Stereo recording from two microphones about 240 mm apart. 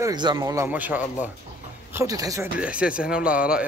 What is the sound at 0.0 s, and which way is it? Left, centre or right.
Speech, centre.